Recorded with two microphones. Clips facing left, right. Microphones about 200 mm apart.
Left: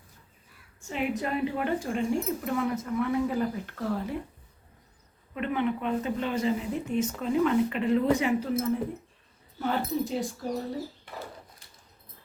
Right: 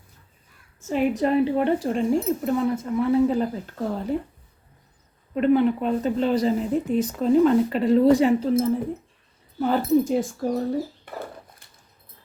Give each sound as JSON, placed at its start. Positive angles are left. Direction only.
{"t": 0.9, "sound": "speech", "side_deg": -35}
{"t": 5.3, "sound": "speech", "side_deg": -35}